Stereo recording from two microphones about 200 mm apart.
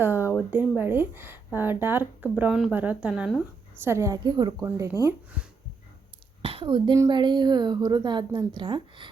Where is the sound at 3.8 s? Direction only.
15° right (ahead or behind).